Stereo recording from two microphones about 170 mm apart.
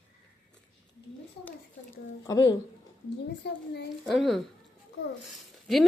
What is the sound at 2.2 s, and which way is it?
Speech, 20° left (ahead or behind).